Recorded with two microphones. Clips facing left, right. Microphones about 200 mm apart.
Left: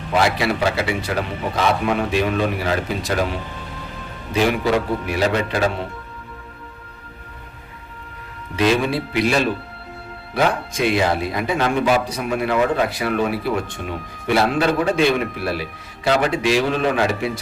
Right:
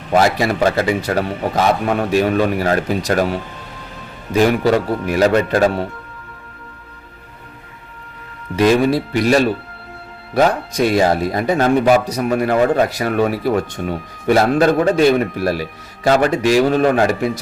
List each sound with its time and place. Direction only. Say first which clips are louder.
0.1 s speech: right 4 dB; 45° right (ahead or behind)
8.5 s speech: right 5 dB; 45° right (ahead or behind)